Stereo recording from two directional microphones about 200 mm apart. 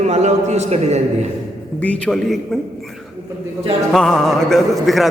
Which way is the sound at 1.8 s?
5° left (ahead or behind).